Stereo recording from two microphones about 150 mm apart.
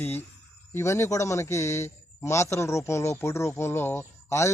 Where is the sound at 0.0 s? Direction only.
15° left (ahead or behind).